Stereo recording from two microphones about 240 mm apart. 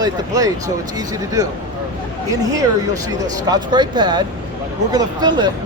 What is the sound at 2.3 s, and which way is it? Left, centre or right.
Speech, centre.